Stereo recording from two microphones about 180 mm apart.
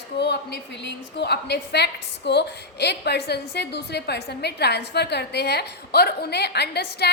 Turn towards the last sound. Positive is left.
turn(degrees=65)  # may be behind; listen again after turning